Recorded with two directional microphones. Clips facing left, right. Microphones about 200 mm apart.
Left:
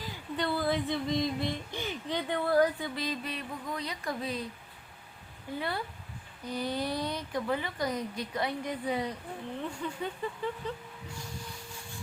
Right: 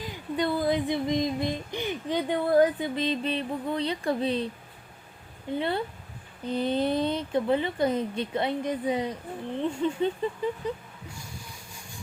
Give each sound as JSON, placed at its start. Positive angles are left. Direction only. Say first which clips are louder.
{"t": 0.0, "sound": "a sound", "louder": "right 5 dB", "side_deg": -15}
{"t": 5.5, "sound": "speech", "louder": "right 6 dB", "side_deg": -25}
{"t": 11.7, "sound": "vehicle", "louder": "left 1 dB", "side_deg": -15}